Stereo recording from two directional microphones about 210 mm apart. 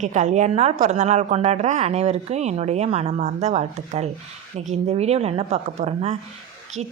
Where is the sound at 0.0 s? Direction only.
35° right (ahead or behind).